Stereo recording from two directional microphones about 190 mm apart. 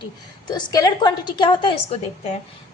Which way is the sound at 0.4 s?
20° left (ahead or behind).